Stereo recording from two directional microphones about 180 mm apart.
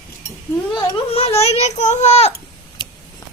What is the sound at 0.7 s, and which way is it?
A child's voice, 25° left (ahead or behind).